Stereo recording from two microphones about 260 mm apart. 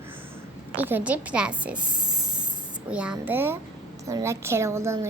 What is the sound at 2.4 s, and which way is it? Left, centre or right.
Spray, centre.